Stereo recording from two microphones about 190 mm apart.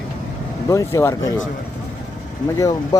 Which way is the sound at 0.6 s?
15° left (ahead or behind).